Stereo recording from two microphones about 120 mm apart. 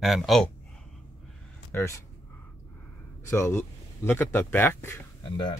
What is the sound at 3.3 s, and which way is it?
Speech, 20° left (ahead or behind).